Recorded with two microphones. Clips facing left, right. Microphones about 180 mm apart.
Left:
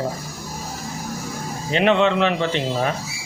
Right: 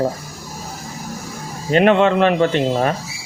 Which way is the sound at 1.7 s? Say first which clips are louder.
Right 4 dB; 50° right (ahead or behind).